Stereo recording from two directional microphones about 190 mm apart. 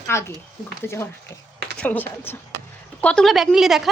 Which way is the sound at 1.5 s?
60° right (ahead or behind).